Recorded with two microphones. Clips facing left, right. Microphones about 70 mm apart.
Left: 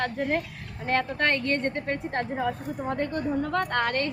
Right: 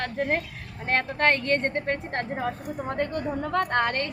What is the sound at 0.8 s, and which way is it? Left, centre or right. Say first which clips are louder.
Speech: right 2 dB; right.